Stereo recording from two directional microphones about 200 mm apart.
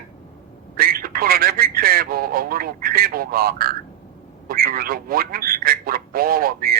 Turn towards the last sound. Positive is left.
turn(degrees=-45)  # may be behind; listen again after turning